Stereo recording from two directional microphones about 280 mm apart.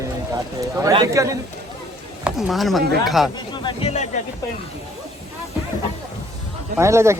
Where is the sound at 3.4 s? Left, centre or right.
Centre.